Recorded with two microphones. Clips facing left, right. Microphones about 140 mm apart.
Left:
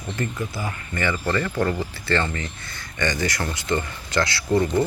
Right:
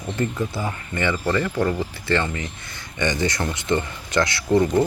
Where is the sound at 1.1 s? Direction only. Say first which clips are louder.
Right 2 dB; 15° right (ahead or behind).